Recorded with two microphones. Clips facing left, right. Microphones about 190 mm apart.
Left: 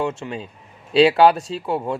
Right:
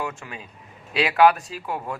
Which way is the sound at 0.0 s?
25° left (ahead or behind).